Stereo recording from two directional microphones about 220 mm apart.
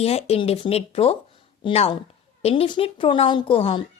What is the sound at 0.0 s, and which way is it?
A woman's voice, 30° left (ahead or behind).